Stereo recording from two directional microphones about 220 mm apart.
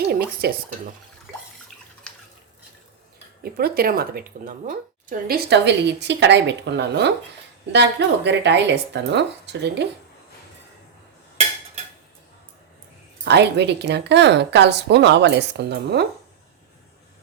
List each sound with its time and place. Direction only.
0.0 s speech: 45° right (ahead or behind)
3.4 s speech: 45° right (ahead or behind)
13.2 s speech: 50° right (ahead or behind)